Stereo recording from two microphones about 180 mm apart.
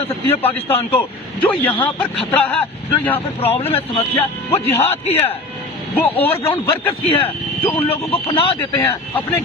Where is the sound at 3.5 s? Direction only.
35° left (ahead or behind).